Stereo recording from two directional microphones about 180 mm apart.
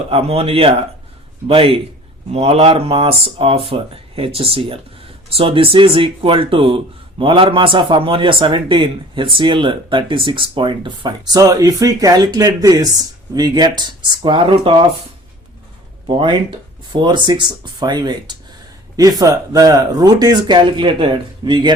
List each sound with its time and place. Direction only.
0.1 s a man's voice: 35° right (ahead or behind)
16.0 s a man's voice: 25° right (ahead or behind)